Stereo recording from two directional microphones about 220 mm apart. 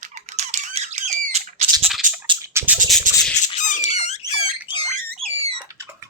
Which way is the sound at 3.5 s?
35° left (ahead or behind).